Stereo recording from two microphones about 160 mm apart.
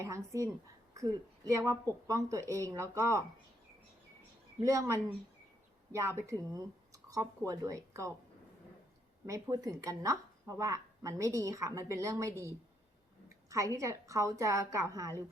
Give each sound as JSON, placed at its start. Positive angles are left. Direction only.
{"t": 0.0, "sound": "a woman's voice", "side_deg": -20}
{"t": 4.6, "sound": "a woman's voice", "side_deg": -20}
{"t": 9.2, "sound": "a woman's voice", "side_deg": -20}